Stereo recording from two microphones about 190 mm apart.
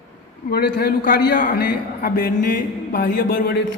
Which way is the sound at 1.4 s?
45° left (ahead or behind).